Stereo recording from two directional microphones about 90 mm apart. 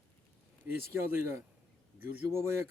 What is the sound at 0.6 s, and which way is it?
Speech, 25° right (ahead or behind).